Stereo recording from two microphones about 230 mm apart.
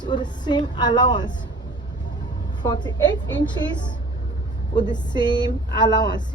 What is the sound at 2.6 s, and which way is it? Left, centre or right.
Speech, centre.